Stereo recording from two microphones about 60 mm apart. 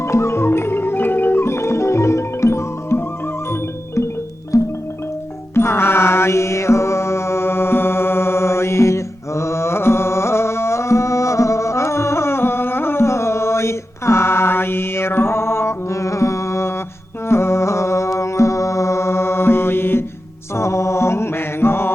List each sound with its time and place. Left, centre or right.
0.0 s music: left
4.5 s music: left
5.5 s music: left
20.6 s music: left